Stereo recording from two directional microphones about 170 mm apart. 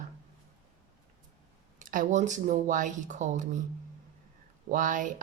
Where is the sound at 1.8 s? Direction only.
50° right (ahead or behind).